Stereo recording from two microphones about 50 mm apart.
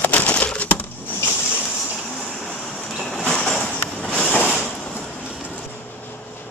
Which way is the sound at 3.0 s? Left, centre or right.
Centre.